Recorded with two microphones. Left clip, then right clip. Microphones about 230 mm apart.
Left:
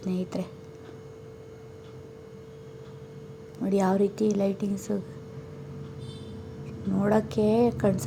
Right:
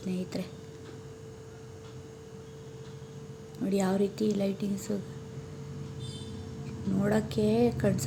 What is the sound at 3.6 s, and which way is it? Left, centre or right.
A woman's voice, centre.